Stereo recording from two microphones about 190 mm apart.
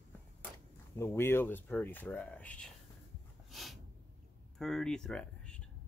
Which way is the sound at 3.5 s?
Centre (ahead or behind).